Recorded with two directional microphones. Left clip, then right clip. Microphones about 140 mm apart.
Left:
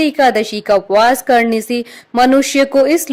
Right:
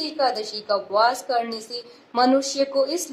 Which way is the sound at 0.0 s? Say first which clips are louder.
Left 11 dB; 50° left (ahead or behind).